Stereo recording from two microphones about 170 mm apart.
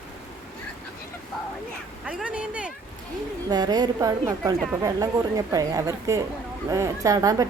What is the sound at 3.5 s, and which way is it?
A woman's voice, 25° right (ahead or behind).